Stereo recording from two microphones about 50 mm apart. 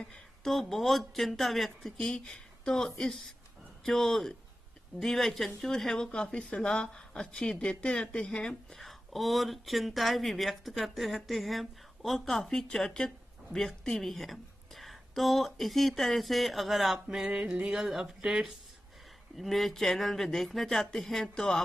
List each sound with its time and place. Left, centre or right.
0.4 s speech: centre
2.0 s speech: centre
8.7 s speech: centre